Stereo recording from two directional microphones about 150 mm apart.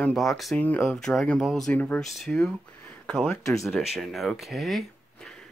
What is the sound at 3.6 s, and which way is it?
Speech, centre (ahead or behind).